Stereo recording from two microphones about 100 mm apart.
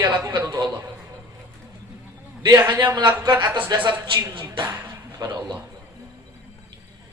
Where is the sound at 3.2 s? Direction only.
45° right (ahead or behind).